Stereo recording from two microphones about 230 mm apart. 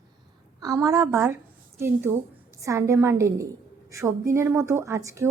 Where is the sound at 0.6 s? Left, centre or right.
Centre.